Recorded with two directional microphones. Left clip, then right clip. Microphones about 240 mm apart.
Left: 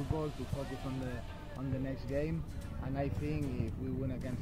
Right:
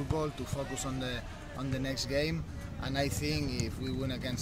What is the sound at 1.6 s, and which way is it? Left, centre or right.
Speech, centre.